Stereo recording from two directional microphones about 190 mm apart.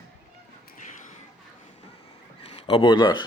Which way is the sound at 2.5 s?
30° left (ahead or behind).